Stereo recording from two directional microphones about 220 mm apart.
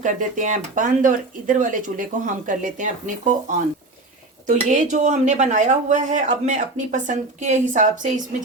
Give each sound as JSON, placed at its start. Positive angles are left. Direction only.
{"t": 0.0, "sound": "speech", "side_deg": -35}
{"t": 4.4, "sound": "speech", "side_deg": -35}